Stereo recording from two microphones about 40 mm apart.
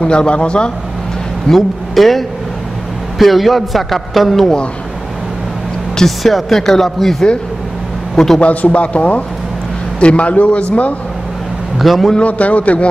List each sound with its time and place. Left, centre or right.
0.0 s a man's voice: left
1.5 s a man's voice: centre
6.0 s speech: centre
8.4 s a man's voice: left
11.8 s a man's voice: centre
12.2 s a man's voice: left